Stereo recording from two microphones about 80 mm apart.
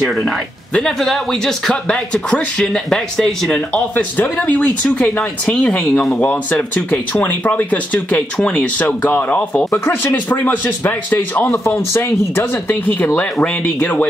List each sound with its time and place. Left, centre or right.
0.7 s speech: centre